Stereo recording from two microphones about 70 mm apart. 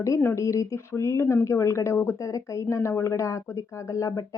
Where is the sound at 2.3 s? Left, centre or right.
Left.